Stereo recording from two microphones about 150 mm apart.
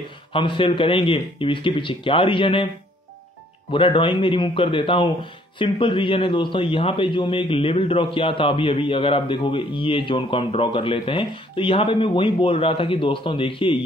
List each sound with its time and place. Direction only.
0.3 s a man's voice: 35° left (ahead or behind)
3.7 s a man's voice: 35° left (ahead or behind)